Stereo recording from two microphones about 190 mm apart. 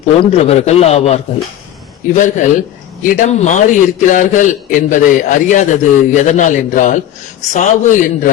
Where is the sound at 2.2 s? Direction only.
40° left (ahead or behind).